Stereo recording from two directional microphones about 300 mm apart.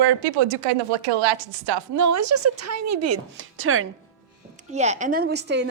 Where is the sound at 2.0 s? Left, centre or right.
Right.